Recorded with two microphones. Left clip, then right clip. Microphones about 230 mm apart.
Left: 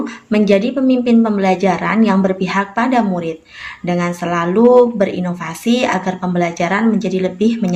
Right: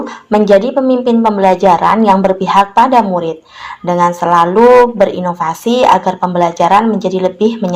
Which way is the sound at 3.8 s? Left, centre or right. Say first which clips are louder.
Right 6 dB; centre.